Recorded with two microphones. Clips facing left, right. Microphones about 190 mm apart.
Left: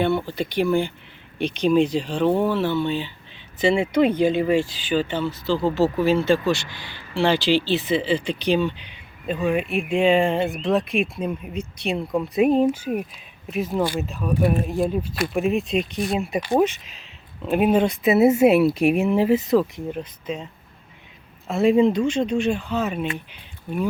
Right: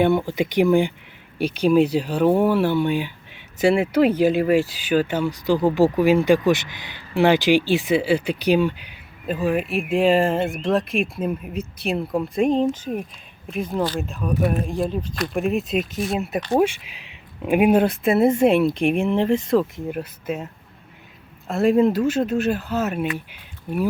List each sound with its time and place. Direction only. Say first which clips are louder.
0.0 s speech: right 3 dB; 15° right (ahead or behind); by 14.1 s 10° left (ahead or behind)
14.1 s speech: left 1 dB; centre (ahead or behind)